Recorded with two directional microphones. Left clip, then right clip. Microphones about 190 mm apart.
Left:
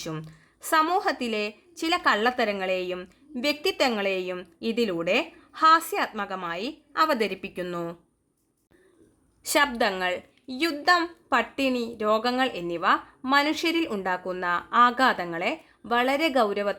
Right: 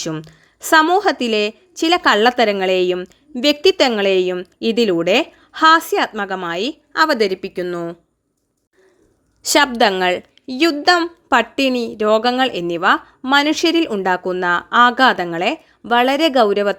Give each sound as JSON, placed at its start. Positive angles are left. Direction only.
{"t": 0.0, "sound": "a woman's voice", "side_deg": -35}
{"t": 9.4, "sound": "a woman's voice", "side_deg": -30}